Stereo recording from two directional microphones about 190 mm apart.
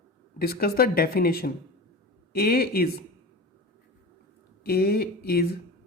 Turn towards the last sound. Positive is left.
turn(degrees=55)  # may be behind; listen again after turning